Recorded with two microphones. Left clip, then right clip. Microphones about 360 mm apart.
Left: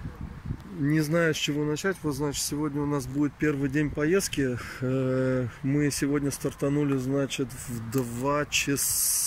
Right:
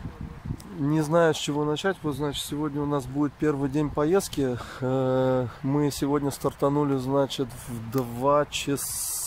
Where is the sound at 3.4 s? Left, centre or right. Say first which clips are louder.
Right 2 dB; right.